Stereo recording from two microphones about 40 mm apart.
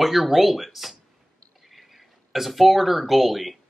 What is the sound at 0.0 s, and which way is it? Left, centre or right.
Speech, centre.